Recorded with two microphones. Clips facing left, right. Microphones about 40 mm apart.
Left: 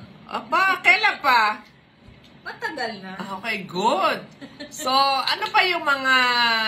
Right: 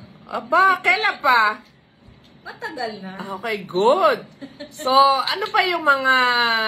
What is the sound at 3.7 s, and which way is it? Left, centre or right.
Speech, right.